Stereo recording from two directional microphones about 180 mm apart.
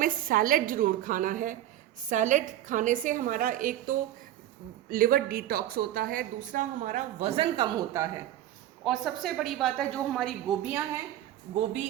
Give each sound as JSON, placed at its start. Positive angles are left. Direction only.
{"t": 0.0, "sound": "a woman's voice", "side_deg": -50}
{"t": 8.8, "sound": "a woman's voice", "side_deg": 0}